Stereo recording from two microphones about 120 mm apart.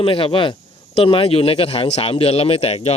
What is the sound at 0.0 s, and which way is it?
Speech, 50° left (ahead or behind).